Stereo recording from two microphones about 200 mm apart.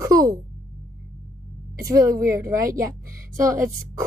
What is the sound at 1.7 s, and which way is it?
Speech, 15° right (ahead or behind).